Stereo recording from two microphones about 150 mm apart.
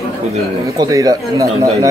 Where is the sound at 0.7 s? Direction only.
25° right (ahead or behind).